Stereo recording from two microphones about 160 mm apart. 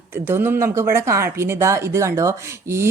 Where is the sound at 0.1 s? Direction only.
15° right (ahead or behind).